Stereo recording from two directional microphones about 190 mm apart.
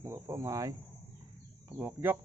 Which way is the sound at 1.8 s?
10° right (ahead or behind).